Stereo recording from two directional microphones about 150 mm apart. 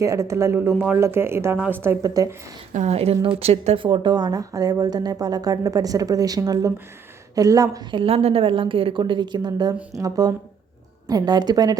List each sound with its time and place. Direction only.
0.0 s a woman's voice: 20° right (ahead or behind)
2.7 s a woman's voice: 45° right (ahead or behind); by 11.8 s 25° right (ahead or behind)